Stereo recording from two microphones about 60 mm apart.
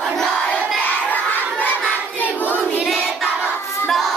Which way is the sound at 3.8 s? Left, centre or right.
Centre.